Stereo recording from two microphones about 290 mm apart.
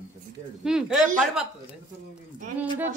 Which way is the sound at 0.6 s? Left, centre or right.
Centre.